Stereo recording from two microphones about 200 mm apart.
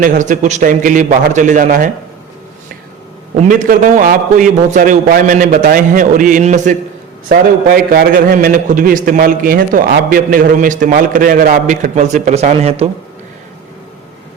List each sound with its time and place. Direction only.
0.0 s a man's voice: 40° right (ahead or behind)
3.3 s a man's voice: 40° right (ahead or behind)